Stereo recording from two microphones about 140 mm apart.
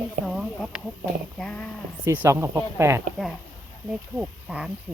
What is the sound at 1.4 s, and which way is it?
Speech, 10° left (ahead or behind).